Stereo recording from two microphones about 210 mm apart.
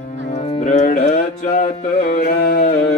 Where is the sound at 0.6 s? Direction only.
40° left (ahead or behind).